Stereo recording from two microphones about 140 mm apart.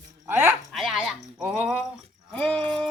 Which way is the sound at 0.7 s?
Centre (ahead or behind).